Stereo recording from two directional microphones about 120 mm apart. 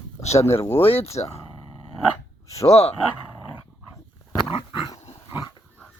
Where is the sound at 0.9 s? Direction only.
55° left (ahead or behind).